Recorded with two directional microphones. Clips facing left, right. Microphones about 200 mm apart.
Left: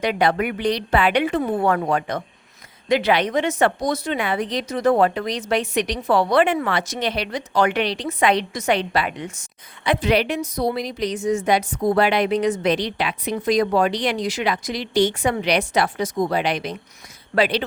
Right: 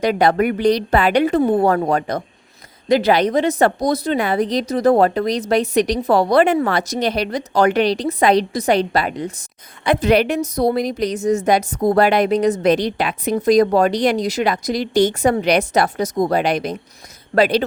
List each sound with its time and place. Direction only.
0.0 s a woman's voice: 40° right (ahead or behind)